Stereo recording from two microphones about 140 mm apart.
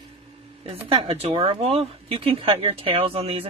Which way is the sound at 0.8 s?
45° right (ahead or behind).